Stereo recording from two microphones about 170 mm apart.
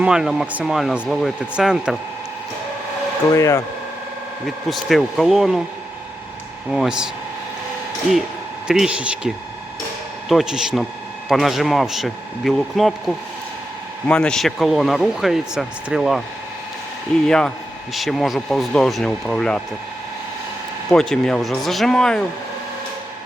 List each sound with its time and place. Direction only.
0.0 s a man's voice: 5° right (ahead or behind)
3.3 s speech: 15° left (ahead or behind)
4.4 s a man's voice: centre (ahead or behind)
6.7 s a man's voice: centre (ahead or behind)
8.6 s a man's voice: 5° right (ahead or behind)
14.1 s a man's voice: 5° left (ahead or behind)
17.2 s a man's voice: 5° left (ahead or behind)
20.9 s a man's voice: 5° left (ahead or behind)